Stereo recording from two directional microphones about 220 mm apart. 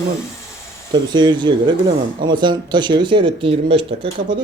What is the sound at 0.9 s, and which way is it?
Speech, 20° right (ahead or behind).